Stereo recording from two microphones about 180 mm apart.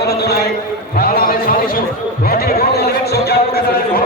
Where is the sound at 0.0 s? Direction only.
65° left (ahead or behind).